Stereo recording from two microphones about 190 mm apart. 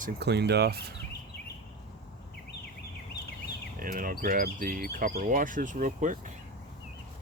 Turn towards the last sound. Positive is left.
turn(degrees=-45)  # may be behind; listen again after turning